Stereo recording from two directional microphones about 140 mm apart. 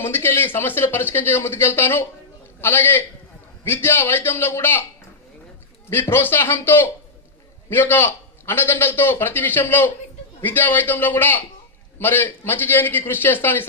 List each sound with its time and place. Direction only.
0.0 s a man's voice: 15° left (ahead or behind)
5.9 s a man's voice: 15° left (ahead or behind)